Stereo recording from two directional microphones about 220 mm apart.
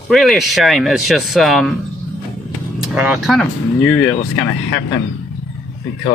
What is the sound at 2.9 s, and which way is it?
Speech, 5° right (ahead or behind).